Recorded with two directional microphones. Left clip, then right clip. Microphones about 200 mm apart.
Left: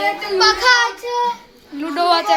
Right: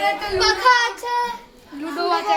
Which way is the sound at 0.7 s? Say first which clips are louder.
Even; 45° left (ahead or behind).